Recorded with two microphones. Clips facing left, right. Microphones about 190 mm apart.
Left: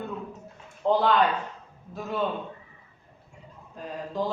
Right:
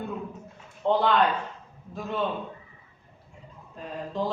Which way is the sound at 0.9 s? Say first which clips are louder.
Even; centre (ahead or behind).